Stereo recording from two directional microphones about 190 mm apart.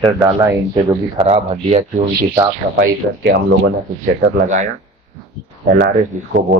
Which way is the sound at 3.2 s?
65° right (ahead or behind).